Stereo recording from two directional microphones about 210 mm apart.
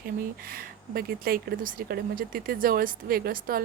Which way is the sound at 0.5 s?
45° right (ahead or behind).